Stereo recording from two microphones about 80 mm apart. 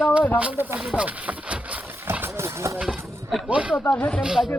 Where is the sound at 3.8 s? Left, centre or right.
Left.